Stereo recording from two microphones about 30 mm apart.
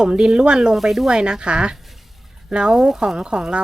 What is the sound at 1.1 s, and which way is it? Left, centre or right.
A woman's voice, right.